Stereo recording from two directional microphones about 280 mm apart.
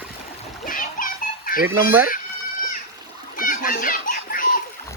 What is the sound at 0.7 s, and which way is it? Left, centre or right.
Children playing, left.